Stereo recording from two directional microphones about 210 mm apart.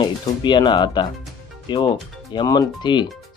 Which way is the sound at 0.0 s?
20° left (ahead or behind).